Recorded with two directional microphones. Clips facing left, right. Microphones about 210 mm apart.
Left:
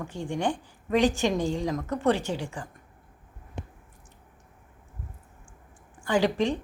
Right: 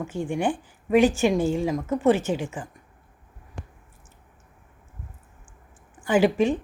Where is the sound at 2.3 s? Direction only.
15° right (ahead or behind).